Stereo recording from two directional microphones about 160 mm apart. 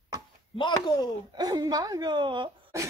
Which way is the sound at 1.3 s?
25° right (ahead or behind).